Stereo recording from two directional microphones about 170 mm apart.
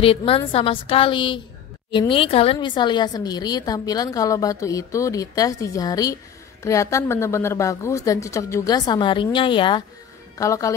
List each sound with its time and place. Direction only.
0.0 s a woman's voice: 35° left (ahead or behind)